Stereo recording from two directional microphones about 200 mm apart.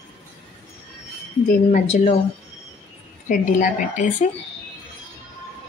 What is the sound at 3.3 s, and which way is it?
Speech, 40° left (ahead or behind).